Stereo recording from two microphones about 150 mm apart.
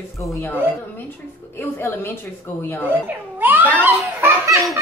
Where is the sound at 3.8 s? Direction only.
15° right (ahead or behind).